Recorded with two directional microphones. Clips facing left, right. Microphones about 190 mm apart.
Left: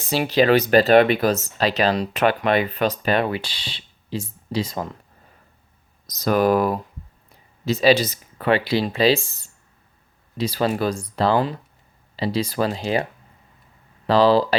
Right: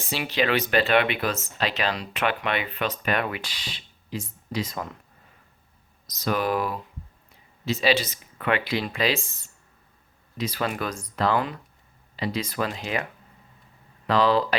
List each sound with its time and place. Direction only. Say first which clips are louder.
0.1 s speech: left 8 dB; 40° left (ahead or behind)
6.1 s speech: left 7 dB; 40° left (ahead or behind)
10.3 s speech: left 6 dB; 30° left (ahead or behind)
14.1 s speech: left 5 dB; 30° left (ahead or behind)